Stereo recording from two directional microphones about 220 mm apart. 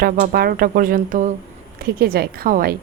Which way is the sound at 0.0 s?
40° right (ahead or behind).